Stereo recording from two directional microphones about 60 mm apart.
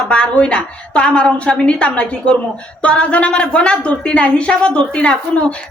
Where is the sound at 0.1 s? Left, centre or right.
Centre.